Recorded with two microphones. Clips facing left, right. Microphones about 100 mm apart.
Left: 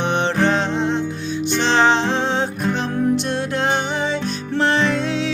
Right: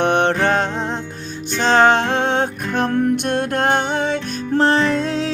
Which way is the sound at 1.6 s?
50° right (ahead or behind).